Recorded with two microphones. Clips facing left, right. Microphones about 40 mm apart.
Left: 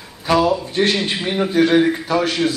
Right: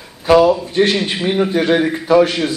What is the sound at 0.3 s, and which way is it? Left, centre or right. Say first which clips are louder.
A man's voice: right 5 dB; centre.